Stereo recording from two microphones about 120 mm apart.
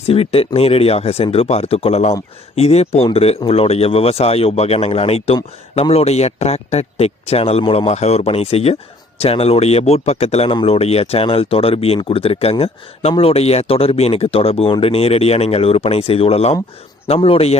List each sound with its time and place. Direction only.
0.1 s speech: 55° left (ahead or behind)
10.5 s speech: 50° left (ahead or behind)